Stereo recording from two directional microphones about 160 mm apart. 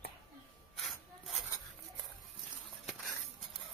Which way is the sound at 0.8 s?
Centre (ahead or behind).